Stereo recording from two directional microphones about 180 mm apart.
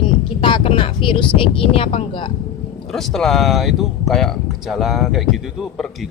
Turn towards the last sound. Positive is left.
turn(degrees=0)  # may be behind; listen again after turning